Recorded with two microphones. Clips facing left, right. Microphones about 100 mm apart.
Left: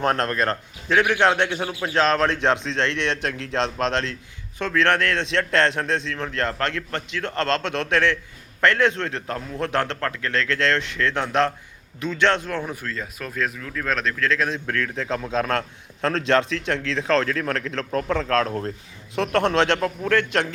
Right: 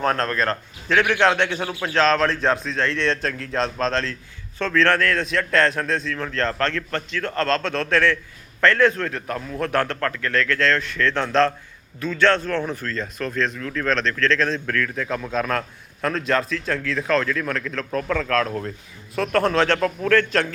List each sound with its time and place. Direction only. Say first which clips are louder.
0.0 s a man's voice: even; 20° left (ahead or behind)
14.7 s a man's voice: right 1 dB; 25° left (ahead or behind)